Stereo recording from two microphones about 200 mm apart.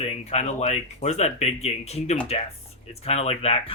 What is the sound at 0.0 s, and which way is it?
Speech, 30° left (ahead or behind).